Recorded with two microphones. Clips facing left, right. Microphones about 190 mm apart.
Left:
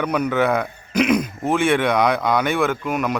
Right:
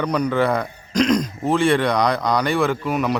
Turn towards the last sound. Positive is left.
turn(degrees=0)  # may be behind; listen again after turning